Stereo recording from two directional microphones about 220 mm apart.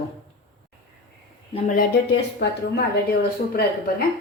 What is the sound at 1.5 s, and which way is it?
Speech, 35° left (ahead or behind).